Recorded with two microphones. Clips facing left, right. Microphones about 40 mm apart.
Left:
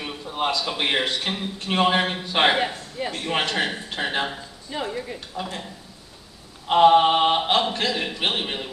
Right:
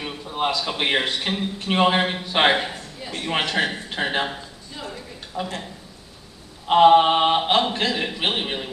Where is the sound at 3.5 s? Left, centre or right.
Centre.